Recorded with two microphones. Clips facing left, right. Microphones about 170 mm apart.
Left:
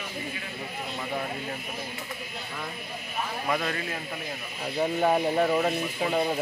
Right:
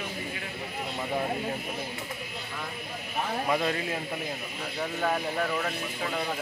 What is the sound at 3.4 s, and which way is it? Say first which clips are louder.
Speech: right 1 dB; 15° right (ahead or behind).